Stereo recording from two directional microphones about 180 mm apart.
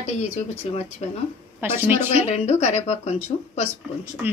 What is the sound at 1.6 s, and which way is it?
Speech, 10° right (ahead or behind).